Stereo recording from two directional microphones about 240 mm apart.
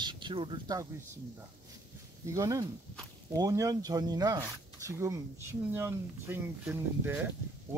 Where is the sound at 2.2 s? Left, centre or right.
Centre.